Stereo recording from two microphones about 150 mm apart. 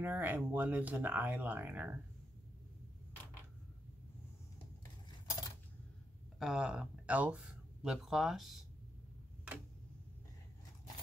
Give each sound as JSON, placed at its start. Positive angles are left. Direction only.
{"t": 0.0, "sound": "speech", "side_deg": -10}
{"t": 6.4, "sound": "speech", "side_deg": -5}